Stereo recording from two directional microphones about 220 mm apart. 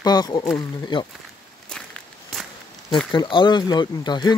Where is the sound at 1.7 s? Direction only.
5° left (ahead or behind).